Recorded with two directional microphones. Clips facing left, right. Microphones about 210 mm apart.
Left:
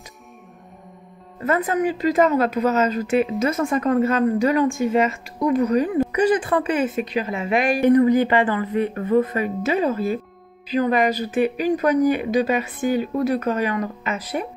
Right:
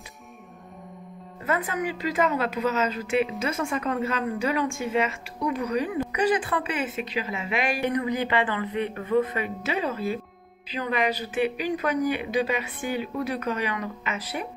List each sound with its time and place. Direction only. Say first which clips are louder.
1.4 s a woman's voice: left 7 dB; 45° left (ahead or behind)